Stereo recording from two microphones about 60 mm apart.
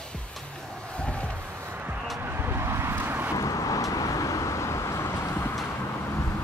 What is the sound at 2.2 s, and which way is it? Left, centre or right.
Vehicle, right.